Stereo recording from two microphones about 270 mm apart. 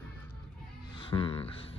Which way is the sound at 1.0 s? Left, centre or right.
Centre.